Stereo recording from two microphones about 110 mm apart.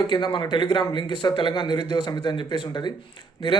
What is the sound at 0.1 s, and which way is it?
A man's voice, 45° left (ahead or behind).